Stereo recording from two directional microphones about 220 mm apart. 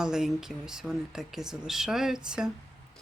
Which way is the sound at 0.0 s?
Centre (ahead or behind).